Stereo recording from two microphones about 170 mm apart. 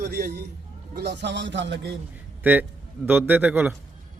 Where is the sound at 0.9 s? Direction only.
85° right.